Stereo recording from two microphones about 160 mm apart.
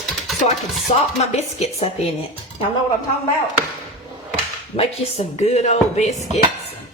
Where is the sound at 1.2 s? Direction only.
45° left (ahead or behind).